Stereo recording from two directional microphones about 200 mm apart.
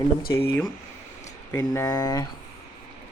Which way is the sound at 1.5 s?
20° left (ahead or behind).